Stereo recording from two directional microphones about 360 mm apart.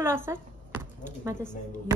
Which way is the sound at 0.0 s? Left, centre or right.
Centre.